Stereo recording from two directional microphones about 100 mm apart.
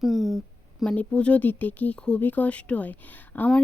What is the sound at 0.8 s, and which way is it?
Speech, 10° left (ahead or behind).